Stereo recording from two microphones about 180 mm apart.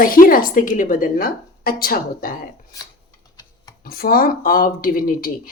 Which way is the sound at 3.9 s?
55° left (ahead or behind).